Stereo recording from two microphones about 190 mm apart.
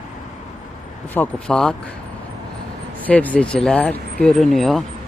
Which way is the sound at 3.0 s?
10° left (ahead or behind).